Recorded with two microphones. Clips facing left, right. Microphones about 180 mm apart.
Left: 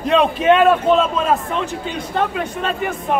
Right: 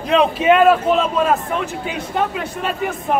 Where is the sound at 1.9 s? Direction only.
5° right (ahead or behind).